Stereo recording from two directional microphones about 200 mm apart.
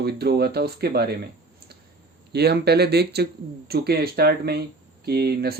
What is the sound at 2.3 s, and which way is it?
Speech, 55° right (ahead or behind).